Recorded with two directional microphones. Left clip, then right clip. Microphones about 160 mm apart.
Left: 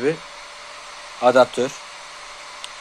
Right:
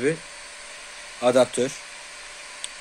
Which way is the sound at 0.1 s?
5° right (ahead or behind).